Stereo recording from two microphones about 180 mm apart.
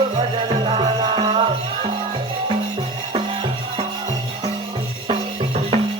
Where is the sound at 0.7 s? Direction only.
30° right (ahead or behind).